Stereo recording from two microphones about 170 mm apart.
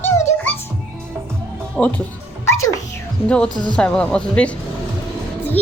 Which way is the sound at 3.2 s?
5° left (ahead or behind).